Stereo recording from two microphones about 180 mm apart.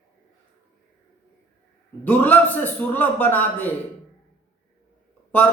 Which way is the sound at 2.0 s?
10° left (ahead or behind).